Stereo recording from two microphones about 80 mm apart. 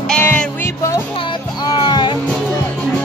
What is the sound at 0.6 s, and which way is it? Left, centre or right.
Music, left.